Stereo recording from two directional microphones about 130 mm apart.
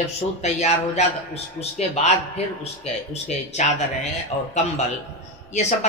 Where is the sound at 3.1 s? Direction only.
60° left (ahead or behind).